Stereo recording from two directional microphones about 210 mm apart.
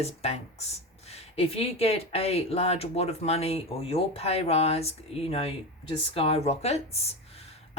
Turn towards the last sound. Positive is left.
turn(degrees=30)  # may be behind; listen again after turning